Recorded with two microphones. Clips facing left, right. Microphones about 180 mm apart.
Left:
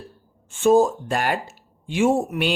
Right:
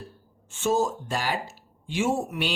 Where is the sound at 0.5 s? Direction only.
55° left (ahead or behind).